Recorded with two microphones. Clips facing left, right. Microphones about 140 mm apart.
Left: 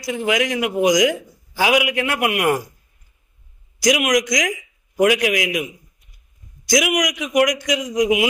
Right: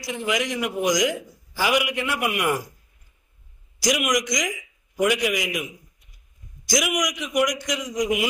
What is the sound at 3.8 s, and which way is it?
A man's voice, 90° left.